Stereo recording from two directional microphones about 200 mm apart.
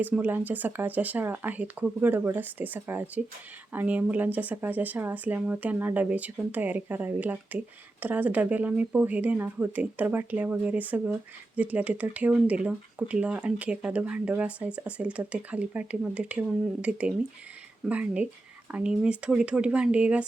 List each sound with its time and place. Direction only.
0.0 s speech: 10° right (ahead or behind)